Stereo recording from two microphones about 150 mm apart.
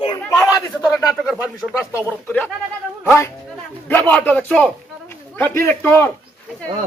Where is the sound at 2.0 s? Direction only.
10° left (ahead or behind).